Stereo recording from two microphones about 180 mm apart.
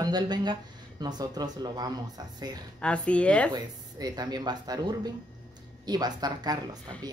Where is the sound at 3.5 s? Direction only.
20° right (ahead or behind).